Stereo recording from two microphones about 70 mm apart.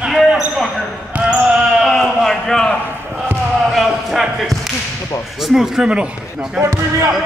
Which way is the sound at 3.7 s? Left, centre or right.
Centre.